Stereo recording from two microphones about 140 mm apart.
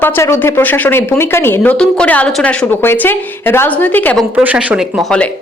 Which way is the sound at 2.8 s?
15° left (ahead or behind).